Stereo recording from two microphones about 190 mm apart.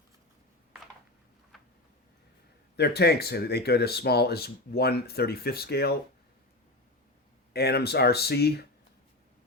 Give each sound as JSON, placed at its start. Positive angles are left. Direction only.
{"t": 1.5, "sound": "a sound", "side_deg": 0}
{"t": 2.7, "sound": "speech", "side_deg": 60}
{"t": 7.5, "sound": "speech", "side_deg": 55}